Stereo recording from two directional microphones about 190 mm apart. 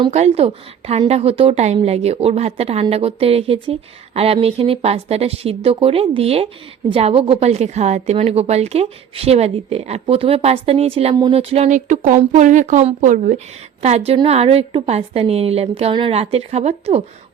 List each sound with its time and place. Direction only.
0.0 s a woman's voice: 35° right (ahead or behind)